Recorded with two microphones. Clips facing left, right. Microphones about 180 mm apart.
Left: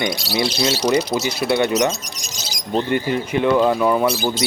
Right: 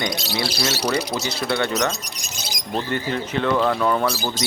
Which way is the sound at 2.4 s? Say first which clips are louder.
Right 2 dB; 50° right (ahead or behind).